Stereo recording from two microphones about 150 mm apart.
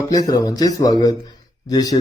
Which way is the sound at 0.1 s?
25° left (ahead or behind).